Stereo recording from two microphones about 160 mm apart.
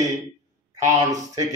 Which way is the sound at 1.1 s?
20° right (ahead or behind).